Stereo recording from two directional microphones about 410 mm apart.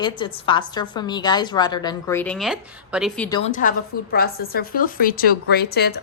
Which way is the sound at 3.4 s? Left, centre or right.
Centre.